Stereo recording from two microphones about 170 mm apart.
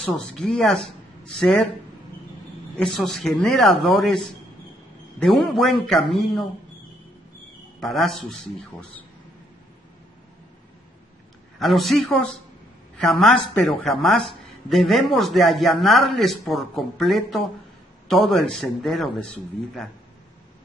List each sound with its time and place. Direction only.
0.0 s speech: 5° left (ahead or behind)
2.8 s speech: centre (ahead or behind)
7.8 s speech: centre (ahead or behind)
11.6 s speech: centre (ahead or behind)